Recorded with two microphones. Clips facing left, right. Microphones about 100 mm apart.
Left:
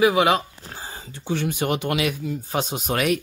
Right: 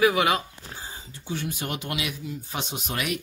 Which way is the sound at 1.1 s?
75° left (ahead or behind).